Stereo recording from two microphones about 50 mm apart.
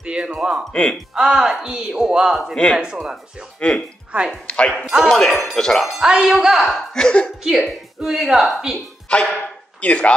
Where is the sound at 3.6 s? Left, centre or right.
Left.